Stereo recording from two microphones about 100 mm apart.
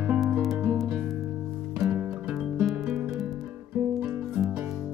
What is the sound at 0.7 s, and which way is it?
Music, centre (ahead or behind).